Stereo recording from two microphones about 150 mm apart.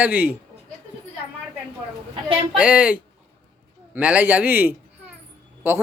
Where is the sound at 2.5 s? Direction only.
5° right (ahead or behind).